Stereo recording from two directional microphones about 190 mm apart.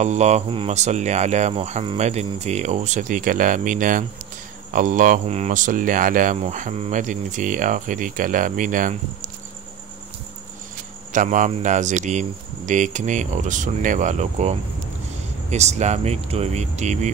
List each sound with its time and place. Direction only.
0.0 s speech: 35° right (ahead or behind)
11.1 s speech: 40° right (ahead or behind)